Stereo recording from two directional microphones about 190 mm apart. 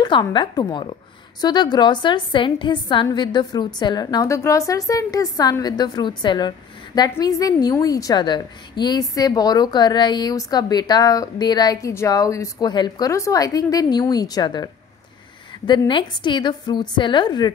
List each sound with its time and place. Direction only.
0.0 s a woman's voice: 20° left (ahead or behind)